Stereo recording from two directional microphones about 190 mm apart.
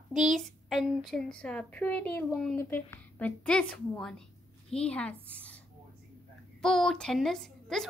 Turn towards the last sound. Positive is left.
turn(degrees=0)  # may be behind; listen again after turning